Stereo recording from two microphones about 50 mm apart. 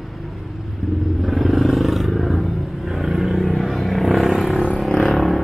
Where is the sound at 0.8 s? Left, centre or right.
Centre.